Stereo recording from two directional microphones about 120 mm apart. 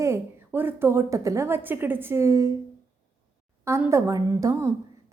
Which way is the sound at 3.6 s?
20° right (ahead or behind).